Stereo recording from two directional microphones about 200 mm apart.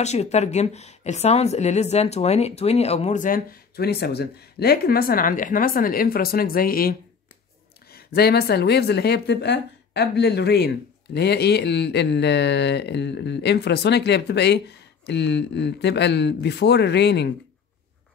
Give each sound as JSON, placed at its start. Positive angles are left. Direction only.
{"t": 0.0, "sound": "speech", "side_deg": 35}